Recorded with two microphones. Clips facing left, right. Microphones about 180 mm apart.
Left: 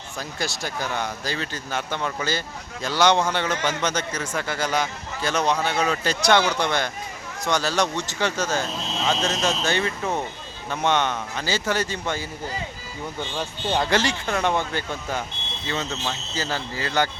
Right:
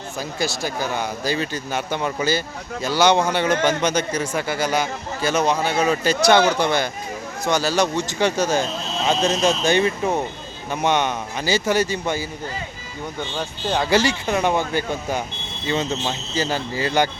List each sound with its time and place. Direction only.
0.2 s a man's voice: 5° right (ahead or behind)
13.7 s a man's voice: centre (ahead or behind)